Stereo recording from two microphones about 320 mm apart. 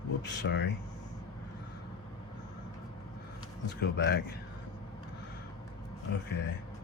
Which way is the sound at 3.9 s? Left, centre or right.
Left.